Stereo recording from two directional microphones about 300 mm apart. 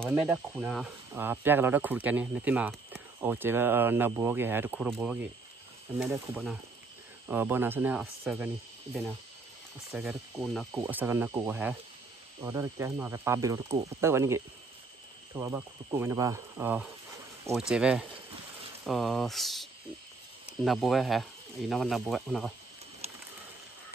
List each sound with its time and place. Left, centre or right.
0.0 s speech: centre
9.9 s speech: centre
23.0 s a sound: right